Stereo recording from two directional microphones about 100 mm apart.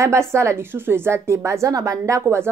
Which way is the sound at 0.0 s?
30° right (ahead or behind).